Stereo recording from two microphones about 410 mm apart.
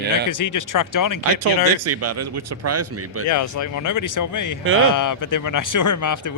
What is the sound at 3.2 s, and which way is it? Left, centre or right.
Speech, left.